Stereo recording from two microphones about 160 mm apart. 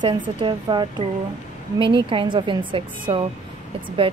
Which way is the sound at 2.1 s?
30° right (ahead or behind).